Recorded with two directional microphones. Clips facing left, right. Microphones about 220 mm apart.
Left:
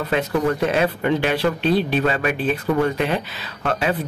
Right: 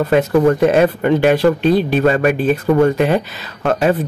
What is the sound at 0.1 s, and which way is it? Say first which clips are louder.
Speech: right 7 dB; 45° right (ahead or behind).